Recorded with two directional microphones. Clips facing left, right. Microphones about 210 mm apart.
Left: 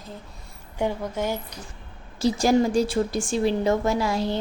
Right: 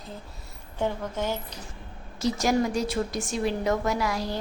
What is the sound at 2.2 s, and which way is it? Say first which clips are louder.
A woman's voice: left 4 dB; 30° left (ahead or behind).